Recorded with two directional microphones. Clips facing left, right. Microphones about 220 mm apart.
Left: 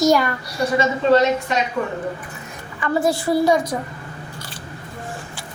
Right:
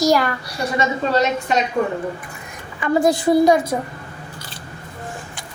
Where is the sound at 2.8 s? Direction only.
15° right (ahead or behind).